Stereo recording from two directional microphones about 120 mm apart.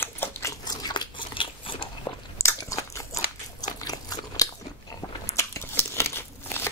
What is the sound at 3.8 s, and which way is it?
Crunch, 30° left (ahead or behind).